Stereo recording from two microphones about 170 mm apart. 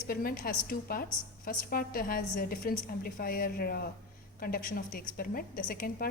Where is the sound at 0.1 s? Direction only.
60° left (ahead or behind).